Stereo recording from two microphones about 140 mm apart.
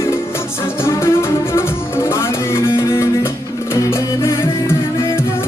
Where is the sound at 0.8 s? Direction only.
20° left (ahead or behind).